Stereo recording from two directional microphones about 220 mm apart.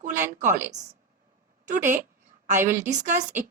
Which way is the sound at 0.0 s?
35° right (ahead or behind).